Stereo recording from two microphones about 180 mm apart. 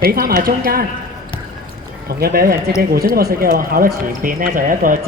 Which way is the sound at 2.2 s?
55° right (ahead or behind).